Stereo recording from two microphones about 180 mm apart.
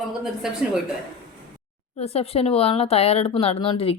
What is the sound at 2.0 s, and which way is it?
Speech, 35° left (ahead or behind).